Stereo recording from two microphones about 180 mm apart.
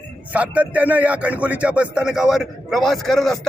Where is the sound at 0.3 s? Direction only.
10° right (ahead or behind).